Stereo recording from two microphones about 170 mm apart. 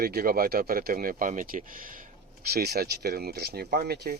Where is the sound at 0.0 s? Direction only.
60° right (ahead or behind).